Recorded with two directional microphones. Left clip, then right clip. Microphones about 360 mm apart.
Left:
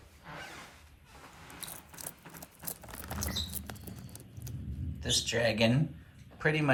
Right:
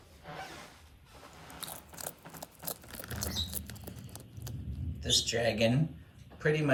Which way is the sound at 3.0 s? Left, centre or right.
Centre.